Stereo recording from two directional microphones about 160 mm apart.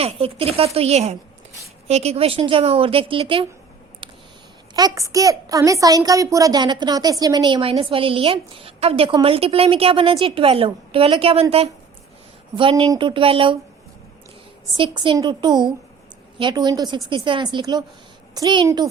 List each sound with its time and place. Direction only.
0.0 s a woman's voice: 40° right (ahead or behind)
4.0 s a sound: 30° right (ahead or behind)
4.7 s a woman's voice: 20° right (ahead or behind)
12.5 s a woman's voice: 30° right (ahead or behind)
14.8 s a woman's voice: 30° right (ahead or behind)